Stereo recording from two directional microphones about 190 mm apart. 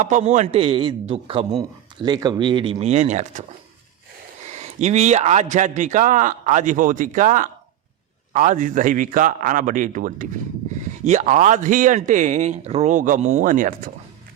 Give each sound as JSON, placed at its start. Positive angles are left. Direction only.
{"t": 0.0, "sound": "speech", "side_deg": -40}
{"t": 4.5, "sound": "a man's voice", "side_deg": -35}